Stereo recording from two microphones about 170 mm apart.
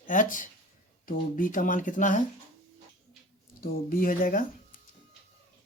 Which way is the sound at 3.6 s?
60° left (ahead or behind).